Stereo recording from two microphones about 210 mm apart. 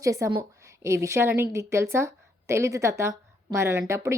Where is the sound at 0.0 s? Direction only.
15° right (ahead or behind).